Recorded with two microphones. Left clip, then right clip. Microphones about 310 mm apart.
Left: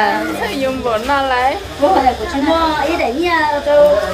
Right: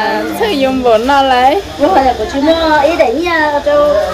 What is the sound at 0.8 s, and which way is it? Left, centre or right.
Speech, right.